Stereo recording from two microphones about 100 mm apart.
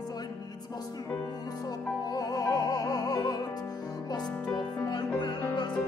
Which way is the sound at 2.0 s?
40° left (ahead or behind).